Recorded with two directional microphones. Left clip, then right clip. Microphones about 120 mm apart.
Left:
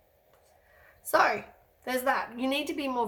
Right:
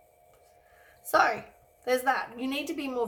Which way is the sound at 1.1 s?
20° left (ahead or behind).